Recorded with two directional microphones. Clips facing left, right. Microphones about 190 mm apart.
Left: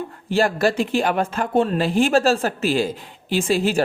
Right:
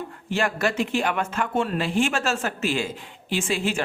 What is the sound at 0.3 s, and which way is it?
Speech, 35° left (ahead or behind).